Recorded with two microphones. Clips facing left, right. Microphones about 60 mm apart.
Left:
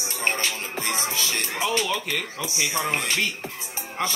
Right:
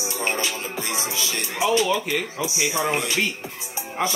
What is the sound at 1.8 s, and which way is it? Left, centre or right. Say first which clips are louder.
Speech: right 4 dB; centre.